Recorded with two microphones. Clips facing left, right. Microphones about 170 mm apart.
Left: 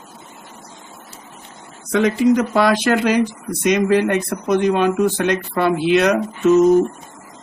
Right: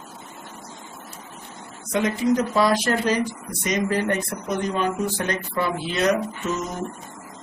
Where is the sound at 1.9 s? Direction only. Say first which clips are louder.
Left 6 dB; 70° left (ahead or behind).